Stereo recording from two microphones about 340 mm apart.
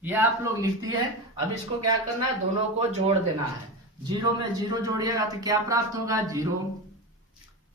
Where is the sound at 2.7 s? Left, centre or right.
Centre.